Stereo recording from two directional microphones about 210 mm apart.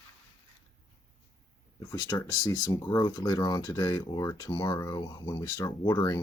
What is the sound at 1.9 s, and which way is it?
Speech, 20° left (ahead or behind).